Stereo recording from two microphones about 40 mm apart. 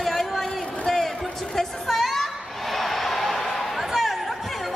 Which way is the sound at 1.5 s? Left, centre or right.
Centre.